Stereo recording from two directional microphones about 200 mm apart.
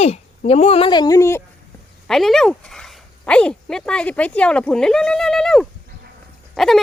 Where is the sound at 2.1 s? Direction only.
Centre (ahead or behind).